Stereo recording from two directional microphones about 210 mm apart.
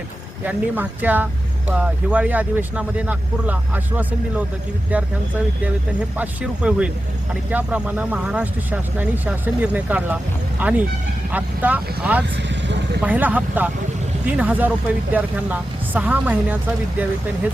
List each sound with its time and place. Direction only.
0.4 s speech: 10° right (ahead or behind)
5.6 s speech: 5° right (ahead or behind)
12.6 s vehicle: 55° right (ahead or behind)
13.0 s speech: 10° right (ahead or behind)